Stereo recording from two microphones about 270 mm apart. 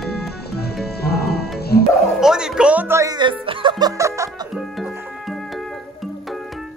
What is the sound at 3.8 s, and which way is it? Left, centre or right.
Music, centre.